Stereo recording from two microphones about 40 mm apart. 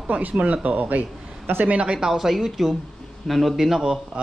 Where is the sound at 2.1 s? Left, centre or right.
Centre.